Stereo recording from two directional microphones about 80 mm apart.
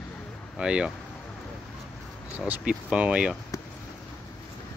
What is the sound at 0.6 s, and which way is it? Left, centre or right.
Speech, centre.